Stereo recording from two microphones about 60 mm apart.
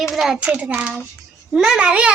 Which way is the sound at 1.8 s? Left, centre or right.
Centre.